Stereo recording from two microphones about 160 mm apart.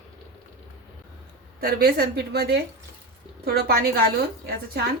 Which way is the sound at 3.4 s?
70° right (ahead or behind).